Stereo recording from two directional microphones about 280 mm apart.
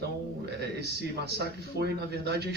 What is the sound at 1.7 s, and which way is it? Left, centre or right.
Speech, right.